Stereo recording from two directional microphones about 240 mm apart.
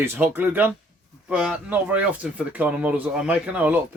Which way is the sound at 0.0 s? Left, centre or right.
Centre.